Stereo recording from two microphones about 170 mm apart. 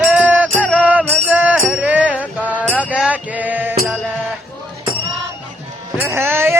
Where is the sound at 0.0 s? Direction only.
10° right (ahead or behind).